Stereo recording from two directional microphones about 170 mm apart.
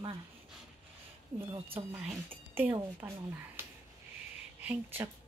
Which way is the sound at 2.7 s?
15° right (ahead or behind).